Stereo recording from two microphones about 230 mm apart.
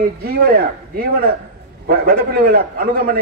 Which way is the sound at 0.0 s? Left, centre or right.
Right.